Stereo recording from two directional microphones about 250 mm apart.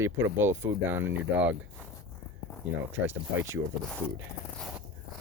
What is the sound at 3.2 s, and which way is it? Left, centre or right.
Speech, centre.